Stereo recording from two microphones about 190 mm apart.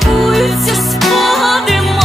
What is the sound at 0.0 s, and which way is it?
Music, centre (ahead or behind).